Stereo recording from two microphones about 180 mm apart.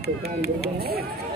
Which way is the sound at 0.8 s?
60° right (ahead or behind).